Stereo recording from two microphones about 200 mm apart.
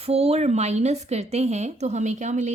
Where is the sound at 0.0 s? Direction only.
30° right (ahead or behind).